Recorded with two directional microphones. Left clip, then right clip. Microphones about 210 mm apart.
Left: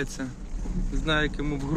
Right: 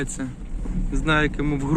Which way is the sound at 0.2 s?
Centre (ahead or behind).